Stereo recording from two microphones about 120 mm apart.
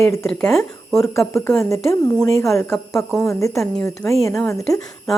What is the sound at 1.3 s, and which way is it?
A woman's voice, 20° left (ahead or behind).